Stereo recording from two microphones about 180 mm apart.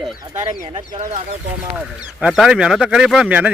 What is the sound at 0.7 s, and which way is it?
Speech, 40° right (ahead or behind).